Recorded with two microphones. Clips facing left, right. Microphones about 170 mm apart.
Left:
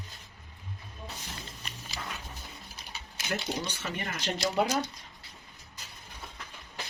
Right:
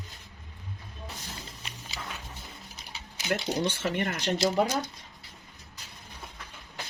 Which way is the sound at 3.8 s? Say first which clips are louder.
Right 6 dB; 65° right (ahead or behind).